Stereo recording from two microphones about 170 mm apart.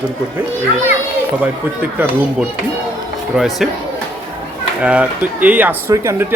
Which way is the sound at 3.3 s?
Centre (ahead or behind).